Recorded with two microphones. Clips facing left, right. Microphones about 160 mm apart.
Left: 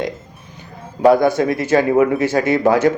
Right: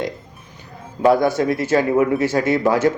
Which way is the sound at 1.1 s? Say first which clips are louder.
Left 2 dB; 15° left (ahead or behind).